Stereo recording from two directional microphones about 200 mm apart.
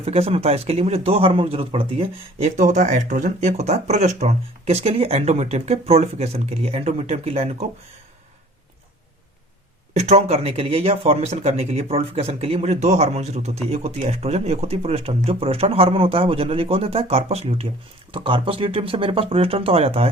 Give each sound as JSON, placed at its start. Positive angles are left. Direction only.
{"t": 0.0, "sound": "speech", "side_deg": -30}
{"t": 2.6, "sound": "speech", "side_deg": -35}
{"t": 9.9, "sound": "speech", "side_deg": -35}